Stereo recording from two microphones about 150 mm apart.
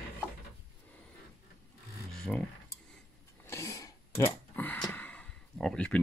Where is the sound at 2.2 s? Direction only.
5° left (ahead or behind).